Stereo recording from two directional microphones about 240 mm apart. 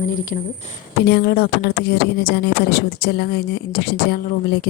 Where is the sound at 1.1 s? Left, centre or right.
Left.